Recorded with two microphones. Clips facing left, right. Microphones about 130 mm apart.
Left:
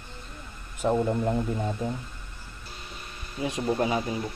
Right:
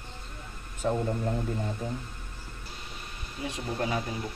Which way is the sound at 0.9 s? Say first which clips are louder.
Left 5 dB; 25° left (ahead or behind).